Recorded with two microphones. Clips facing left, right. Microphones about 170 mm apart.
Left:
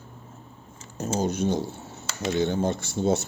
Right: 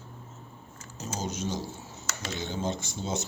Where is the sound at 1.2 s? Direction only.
55° left (ahead or behind).